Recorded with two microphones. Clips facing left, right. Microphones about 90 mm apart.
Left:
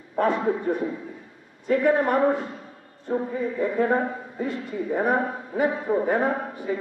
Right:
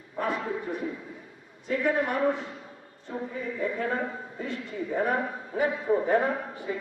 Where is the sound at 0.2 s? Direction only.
55° left (ahead or behind); by 4.0 s 35° left (ahead or behind).